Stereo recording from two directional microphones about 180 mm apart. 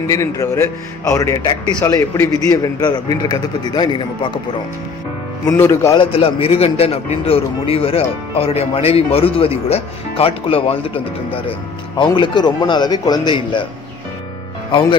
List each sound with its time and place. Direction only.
0.1 s speech: 15° left (ahead or behind)
5.5 s speech: 15° left (ahead or behind)
5.9 s a man's voice: 30° left (ahead or behind)
14.7 s speech: 25° left (ahead or behind)